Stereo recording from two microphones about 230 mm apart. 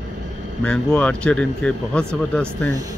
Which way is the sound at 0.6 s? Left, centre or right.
Centre.